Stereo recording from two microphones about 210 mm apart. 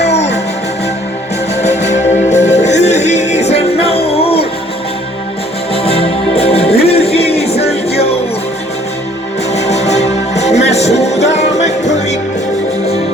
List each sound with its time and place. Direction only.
0.0 s music: 30° left (ahead or behind)
1.5 s music: 30° left (ahead or behind)
5.7 s music: 25° left (ahead or behind)
9.5 s music: 30° left (ahead or behind)